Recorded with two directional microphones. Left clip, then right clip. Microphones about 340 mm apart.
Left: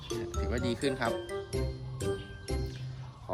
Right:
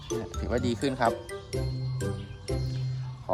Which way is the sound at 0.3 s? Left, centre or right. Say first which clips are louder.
Right 3 dB; centre.